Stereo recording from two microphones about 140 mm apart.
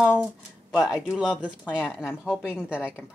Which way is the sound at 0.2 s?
5° right (ahead or behind).